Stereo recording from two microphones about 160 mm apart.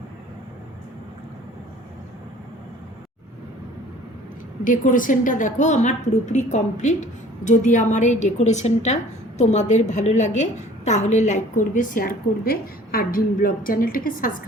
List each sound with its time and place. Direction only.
4.6 s a woman's voice: 55° left (ahead or behind)